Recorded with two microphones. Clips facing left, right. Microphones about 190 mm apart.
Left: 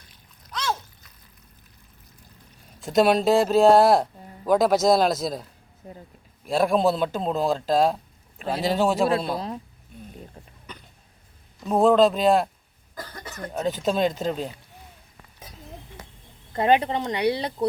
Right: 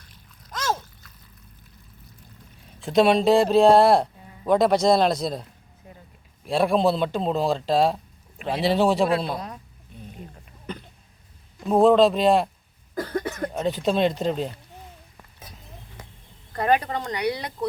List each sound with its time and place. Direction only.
0.5 s splash: 45° right (ahead or behind)
2.6 s a man's voice: centre (ahead or behind)
11.7 s a man's voice: centre (ahead or behind)
12.9 s cough: 55° right (ahead or behind)
13.5 s a man's voice: centre (ahead or behind)
16.5 s speech: 25° left (ahead or behind)